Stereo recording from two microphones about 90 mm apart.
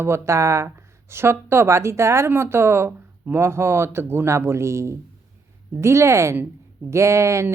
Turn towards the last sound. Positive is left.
turn(degrees=-30)  # may be behind; listen again after turning